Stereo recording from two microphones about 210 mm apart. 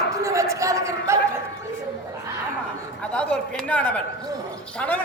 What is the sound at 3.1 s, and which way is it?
Speech, 5° left (ahead or behind).